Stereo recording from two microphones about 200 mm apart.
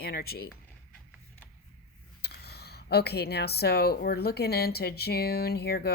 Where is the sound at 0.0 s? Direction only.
50° left (ahead or behind).